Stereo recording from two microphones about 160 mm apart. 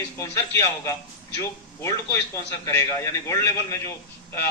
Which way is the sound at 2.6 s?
20° left (ahead or behind).